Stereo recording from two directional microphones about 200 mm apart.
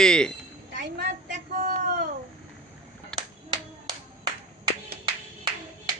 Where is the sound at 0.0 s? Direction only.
5° left (ahead or behind).